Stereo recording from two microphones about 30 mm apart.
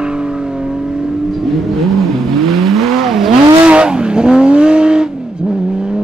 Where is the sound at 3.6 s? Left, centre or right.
Right.